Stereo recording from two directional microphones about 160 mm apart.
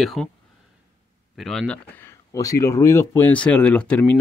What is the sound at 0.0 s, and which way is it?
Speech, centre (ahead or behind).